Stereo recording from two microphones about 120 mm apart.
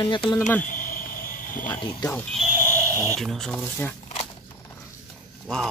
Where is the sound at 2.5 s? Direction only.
20° right (ahead or behind).